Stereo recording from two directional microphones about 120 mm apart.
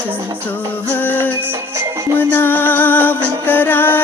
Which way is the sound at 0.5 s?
15° left (ahead or behind).